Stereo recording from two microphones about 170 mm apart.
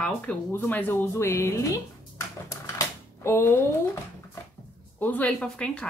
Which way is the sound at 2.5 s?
15° left (ahead or behind).